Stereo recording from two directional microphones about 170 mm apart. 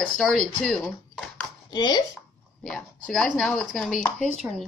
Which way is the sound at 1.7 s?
25° left (ahead or behind).